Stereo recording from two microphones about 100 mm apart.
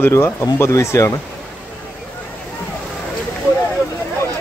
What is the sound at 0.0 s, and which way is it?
Speech, 25° left (ahead or behind).